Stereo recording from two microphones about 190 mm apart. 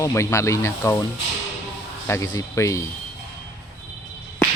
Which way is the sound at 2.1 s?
15° left (ahead or behind).